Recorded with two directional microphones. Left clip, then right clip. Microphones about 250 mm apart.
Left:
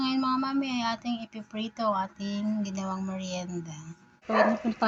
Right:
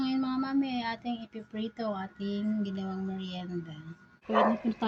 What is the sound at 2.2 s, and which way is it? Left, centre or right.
Speech, centre.